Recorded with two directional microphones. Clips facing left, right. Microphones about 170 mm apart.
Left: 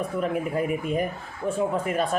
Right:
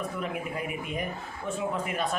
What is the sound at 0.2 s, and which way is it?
Speech, 40° left (ahead or behind).